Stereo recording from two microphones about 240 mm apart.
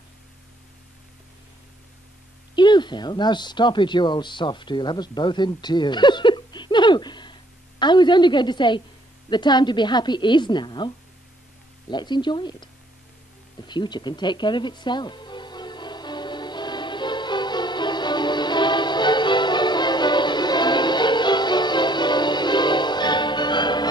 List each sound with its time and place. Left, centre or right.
2.5 s a woman's voice: centre
11.9 s a woman's voice: centre
13.7 s music: centre